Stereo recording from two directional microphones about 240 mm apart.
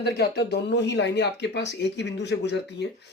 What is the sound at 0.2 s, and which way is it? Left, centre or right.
Speech, left.